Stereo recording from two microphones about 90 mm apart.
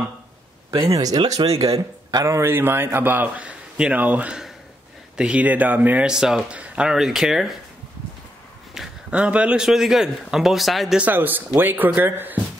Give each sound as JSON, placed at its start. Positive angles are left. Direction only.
{"t": 0.7, "sound": "speech", "side_deg": -40}
{"t": 1.1, "sound": "speech", "side_deg": -50}
{"t": 1.4, "sound": "speech", "side_deg": -90}
{"t": 2.2, "sound": "a man's voice", "side_deg": -30}
{"t": 8.7, "sound": "speech", "side_deg": -10}
{"t": 9.7, "sound": "speech", "side_deg": -5}
{"t": 11.0, "sound": "a man's voice", "side_deg": -20}